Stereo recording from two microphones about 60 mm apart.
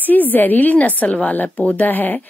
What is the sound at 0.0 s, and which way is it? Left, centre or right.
Speech, left.